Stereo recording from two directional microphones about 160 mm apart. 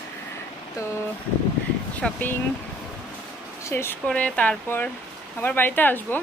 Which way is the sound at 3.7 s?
15° left (ahead or behind).